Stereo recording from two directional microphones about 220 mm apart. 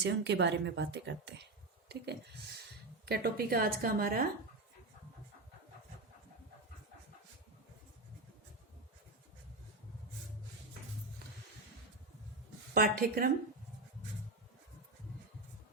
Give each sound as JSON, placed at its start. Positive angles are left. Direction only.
{"t": 0.0, "sound": "a woman's voice", "side_deg": -50}
{"t": 12.7, "sound": "a woman's voice", "side_deg": -40}